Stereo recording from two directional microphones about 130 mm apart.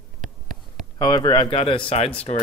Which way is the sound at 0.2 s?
75° right (ahead or behind).